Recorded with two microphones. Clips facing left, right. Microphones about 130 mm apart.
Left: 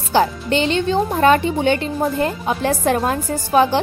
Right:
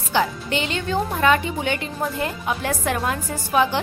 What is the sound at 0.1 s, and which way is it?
Speech, 35° left (ahead or behind).